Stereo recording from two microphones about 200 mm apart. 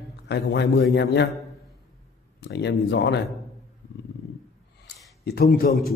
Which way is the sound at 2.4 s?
60° left (ahead or behind).